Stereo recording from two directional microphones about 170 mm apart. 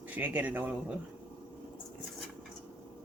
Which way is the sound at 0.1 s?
10° right (ahead or behind).